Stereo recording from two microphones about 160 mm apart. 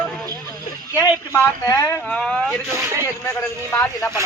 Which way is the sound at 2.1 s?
5° left (ahead or behind).